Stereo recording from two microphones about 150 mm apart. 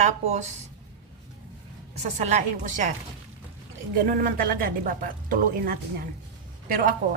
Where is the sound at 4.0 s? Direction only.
70° right (ahead or behind).